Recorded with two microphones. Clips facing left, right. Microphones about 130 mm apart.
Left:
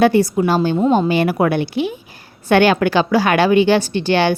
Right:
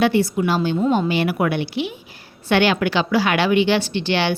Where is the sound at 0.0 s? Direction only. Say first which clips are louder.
Left 4 dB; 45° left (ahead or behind).